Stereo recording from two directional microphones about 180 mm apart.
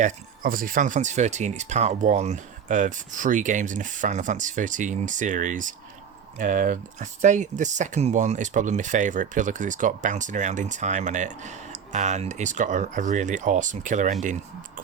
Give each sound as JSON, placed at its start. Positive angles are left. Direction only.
{"t": 0.0, "sound": "speech", "side_deg": -50}